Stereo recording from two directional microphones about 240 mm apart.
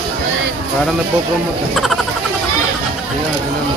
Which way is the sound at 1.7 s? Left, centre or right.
Centre.